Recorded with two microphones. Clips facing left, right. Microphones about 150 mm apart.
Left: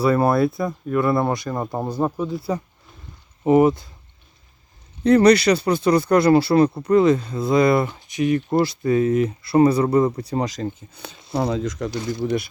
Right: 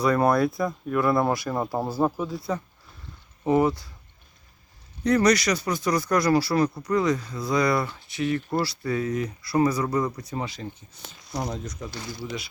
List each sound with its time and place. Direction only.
0.0 s speech: 5° left (ahead or behind)
3.4 s speech: 20° left (ahead or behind)
5.0 s speech: 30° left (ahead or behind)
10.5 s speech: 75° left (ahead or behind)
12.1 s speech: 50° left (ahead or behind)